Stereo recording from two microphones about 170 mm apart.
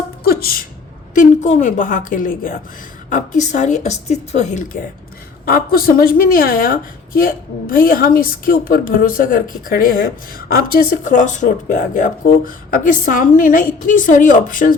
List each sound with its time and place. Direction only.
0.3 s a sound: 65° left (ahead or behind)
1.1 s speech: 45° left (ahead or behind)
5.5 s a woman's voice: 60° left (ahead or behind)